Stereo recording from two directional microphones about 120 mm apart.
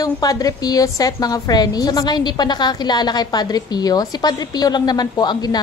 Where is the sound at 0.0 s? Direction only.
30° left (ahead or behind).